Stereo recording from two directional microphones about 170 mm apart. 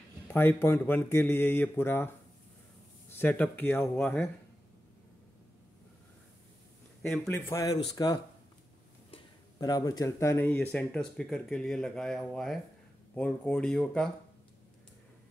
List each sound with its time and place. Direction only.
0.3 s speech: 10° left (ahead or behind)
3.1 s speech: 10° left (ahead or behind)
7.0 s speech: 15° left (ahead or behind)
9.6 s speech: 20° left (ahead or behind); by 14.1 s 5° left (ahead or behind)